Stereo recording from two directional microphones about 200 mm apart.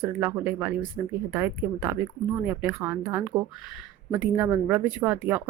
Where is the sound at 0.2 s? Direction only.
10° right (ahead or behind).